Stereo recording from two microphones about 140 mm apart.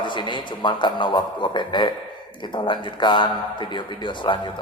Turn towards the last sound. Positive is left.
turn(degrees=35)  # may be behind; listen again after turning